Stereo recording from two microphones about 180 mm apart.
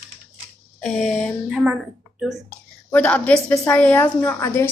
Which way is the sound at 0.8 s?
5° left (ahead or behind).